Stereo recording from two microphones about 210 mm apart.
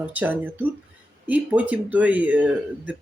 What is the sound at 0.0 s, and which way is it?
Speech, 5° right (ahead or behind).